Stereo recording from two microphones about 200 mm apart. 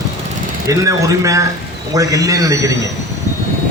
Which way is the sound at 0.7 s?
15° right (ahead or behind).